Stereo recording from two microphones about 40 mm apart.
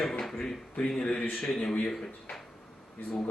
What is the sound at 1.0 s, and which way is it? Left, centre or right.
Speech, left.